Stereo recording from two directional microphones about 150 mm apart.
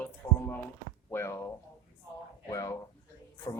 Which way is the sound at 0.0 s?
15° left (ahead or behind).